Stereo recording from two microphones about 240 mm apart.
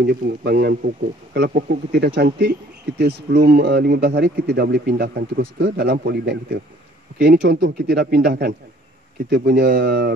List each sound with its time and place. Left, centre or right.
0.0 s speech: right